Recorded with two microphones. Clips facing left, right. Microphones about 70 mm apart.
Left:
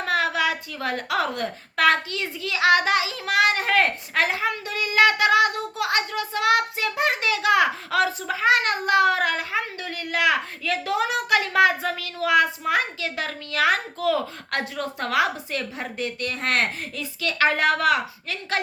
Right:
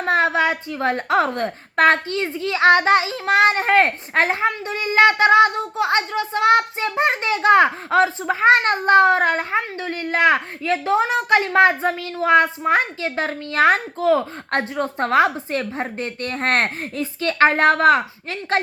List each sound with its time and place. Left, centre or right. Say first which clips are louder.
0.0 s a woman's voice: right 5 dB; right